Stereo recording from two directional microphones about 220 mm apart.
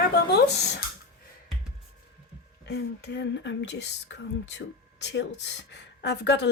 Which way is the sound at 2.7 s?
50° left (ahead or behind).